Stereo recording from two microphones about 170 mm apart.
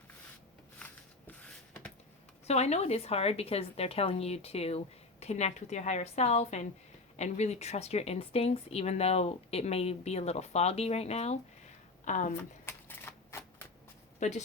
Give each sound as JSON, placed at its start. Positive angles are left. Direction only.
{"t": 1.3, "sound": "a sound", "side_deg": 10}
{"t": 2.5, "sound": "speech", "side_deg": 40}
{"t": 12.4, "sound": "shuffling cards", "side_deg": 10}
{"t": 14.2, "sound": "speech", "side_deg": 45}